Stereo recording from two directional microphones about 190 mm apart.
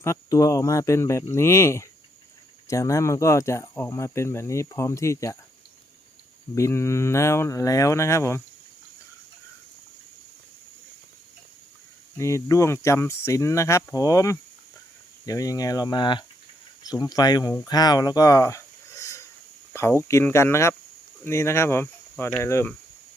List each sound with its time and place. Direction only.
0.0 s speech: 15° left (ahead or behind)
6.5 s speech: 15° left (ahead or behind)
12.1 s speech: 15° left (ahead or behind)